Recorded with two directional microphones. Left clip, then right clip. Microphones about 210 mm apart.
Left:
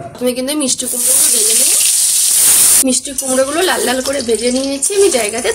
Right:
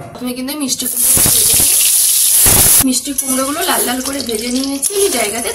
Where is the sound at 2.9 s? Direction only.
40° left (ahead or behind).